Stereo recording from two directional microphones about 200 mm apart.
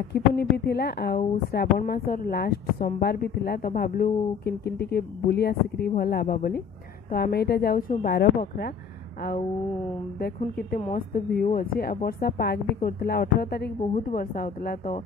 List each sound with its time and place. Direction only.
0.1 s a woman's voice: 55° left (ahead or behind)
10.1 s a woman's voice: 50° left (ahead or behind)